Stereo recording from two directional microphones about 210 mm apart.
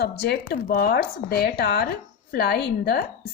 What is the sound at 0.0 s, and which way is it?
Speech, 50° left (ahead or behind).